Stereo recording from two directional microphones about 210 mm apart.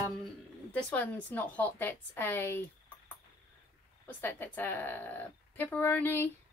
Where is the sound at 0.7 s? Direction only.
5° left (ahead or behind).